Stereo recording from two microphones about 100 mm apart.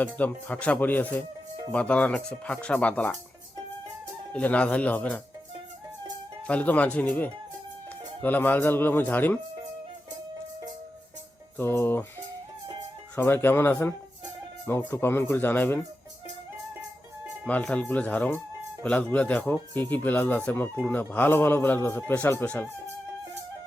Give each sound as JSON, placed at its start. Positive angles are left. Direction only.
{"t": 0.2, "sound": "speech", "side_deg": 15}
{"t": 4.3, "sound": "speech", "side_deg": 15}
{"t": 6.5, "sound": "a man's voice", "side_deg": 15}
{"t": 11.5, "sound": "a man's voice", "side_deg": 20}
{"t": 13.1, "sound": "a man's voice", "side_deg": 20}
{"t": 17.4, "sound": "a man's voice", "side_deg": 10}